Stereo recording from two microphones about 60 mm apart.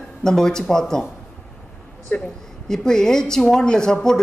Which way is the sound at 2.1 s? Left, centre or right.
Centre.